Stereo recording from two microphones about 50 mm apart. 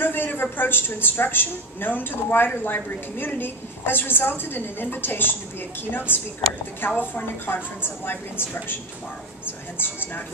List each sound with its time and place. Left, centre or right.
0.0 s a woman's voice: left